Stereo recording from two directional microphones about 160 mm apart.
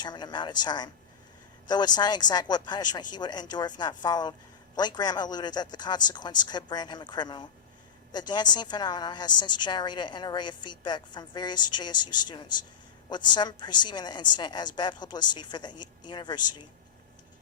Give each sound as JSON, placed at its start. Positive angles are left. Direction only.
{"t": 0.0, "sound": "a woman's voice", "side_deg": 25}